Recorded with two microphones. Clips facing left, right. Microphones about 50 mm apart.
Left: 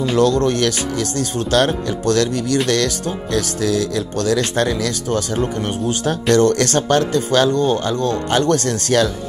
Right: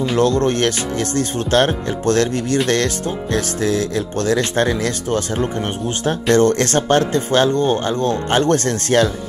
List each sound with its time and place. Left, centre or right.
0.2 s speech: right